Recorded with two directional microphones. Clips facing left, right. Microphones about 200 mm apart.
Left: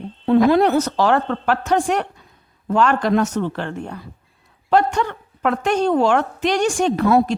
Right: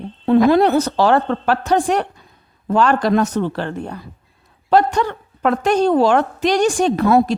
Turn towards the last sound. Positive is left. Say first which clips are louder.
# right 2 dB
turn(degrees=-45)  # may be behind; listen again after turning